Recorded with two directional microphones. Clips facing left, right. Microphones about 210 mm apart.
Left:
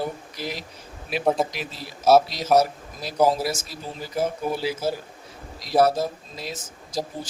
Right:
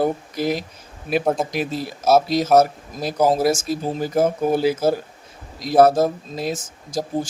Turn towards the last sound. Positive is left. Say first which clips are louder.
# right 6 dB
turn(degrees=-50)  # may be behind; listen again after turning